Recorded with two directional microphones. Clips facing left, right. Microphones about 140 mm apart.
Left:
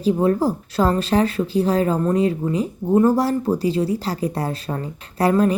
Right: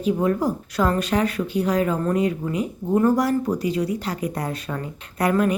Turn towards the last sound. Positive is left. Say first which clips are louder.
# left 3 dB
turn(degrees=30)  # may be behind; listen again after turning